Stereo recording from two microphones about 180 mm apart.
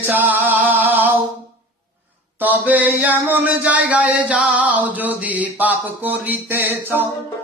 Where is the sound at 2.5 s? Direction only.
10° right (ahead or behind).